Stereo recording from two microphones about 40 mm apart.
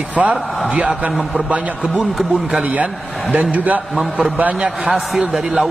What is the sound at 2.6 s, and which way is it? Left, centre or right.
A man's voice, right.